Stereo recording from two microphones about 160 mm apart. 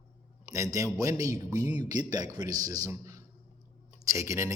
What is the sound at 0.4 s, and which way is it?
A man's voice, 20° right (ahead or behind).